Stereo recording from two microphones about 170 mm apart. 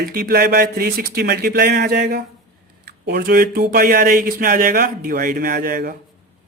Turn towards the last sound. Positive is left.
turn(degrees=-55)  # may be behind; listen again after turning